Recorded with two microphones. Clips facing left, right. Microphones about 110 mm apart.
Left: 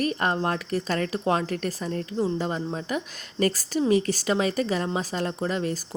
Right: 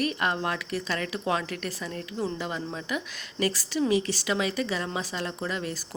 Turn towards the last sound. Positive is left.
turn(degrees=40)  # may be behind; listen again after turning